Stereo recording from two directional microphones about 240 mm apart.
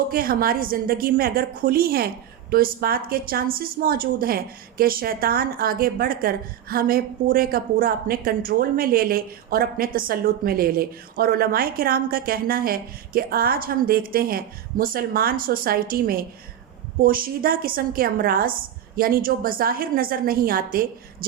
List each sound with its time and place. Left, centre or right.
0.1 s a woman's voice: right